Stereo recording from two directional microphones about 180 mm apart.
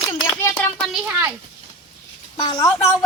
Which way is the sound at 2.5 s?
25° left (ahead or behind).